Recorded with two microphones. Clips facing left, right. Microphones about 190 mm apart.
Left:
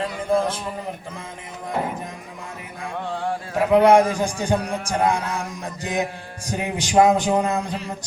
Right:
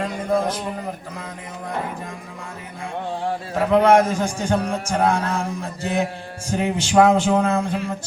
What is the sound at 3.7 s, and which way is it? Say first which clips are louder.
A man's voice: left 1 dB; 10° left (ahead or behind).